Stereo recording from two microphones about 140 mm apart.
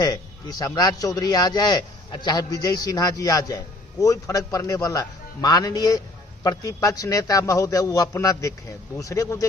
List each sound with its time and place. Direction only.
0.6 s a man's voice: 25° left (ahead or behind)